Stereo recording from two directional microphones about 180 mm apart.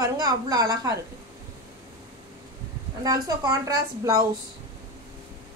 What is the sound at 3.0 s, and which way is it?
A woman's voice, 20° right (ahead or behind).